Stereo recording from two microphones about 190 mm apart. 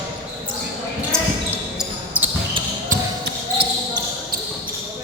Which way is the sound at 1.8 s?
10° right (ahead or behind).